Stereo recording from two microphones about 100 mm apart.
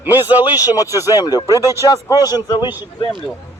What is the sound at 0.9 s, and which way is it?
Speech, 35° left (ahead or behind).